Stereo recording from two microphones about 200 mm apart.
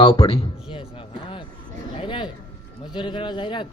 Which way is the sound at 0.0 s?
25° left (ahead or behind).